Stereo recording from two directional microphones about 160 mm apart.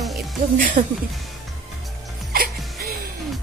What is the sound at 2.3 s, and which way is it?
Music, 70° right (ahead or behind).